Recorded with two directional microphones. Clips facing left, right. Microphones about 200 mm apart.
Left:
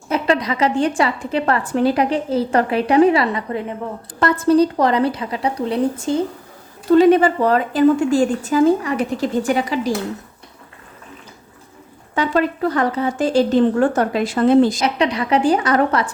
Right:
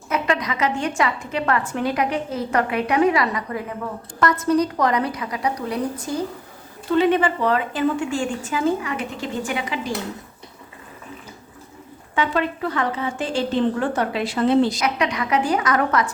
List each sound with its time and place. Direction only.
0.1 s a woman's voice: 30° left (ahead or behind)
6.9 s a woman's voice: 40° left (ahead or behind)
12.1 s a woman's voice: 40° left (ahead or behind)
14.8 s a woman's voice: 30° left (ahead or behind)